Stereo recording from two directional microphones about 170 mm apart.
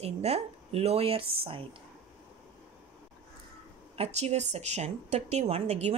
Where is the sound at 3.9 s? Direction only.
40° right (ahead or behind).